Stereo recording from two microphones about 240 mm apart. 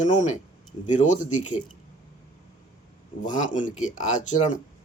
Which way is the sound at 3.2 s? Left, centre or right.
Left.